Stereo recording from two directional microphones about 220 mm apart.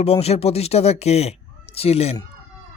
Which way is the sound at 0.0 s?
30° left (ahead or behind).